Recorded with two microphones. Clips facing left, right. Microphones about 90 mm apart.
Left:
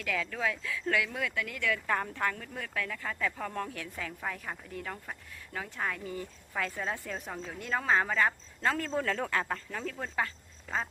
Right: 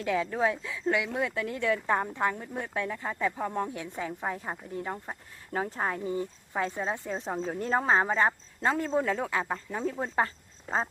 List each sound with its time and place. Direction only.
0.0 s speech: 25° right (ahead or behind)
5.5 s speech: 35° right (ahead or behind)